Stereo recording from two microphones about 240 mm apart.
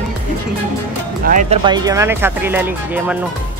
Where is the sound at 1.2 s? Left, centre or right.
Right.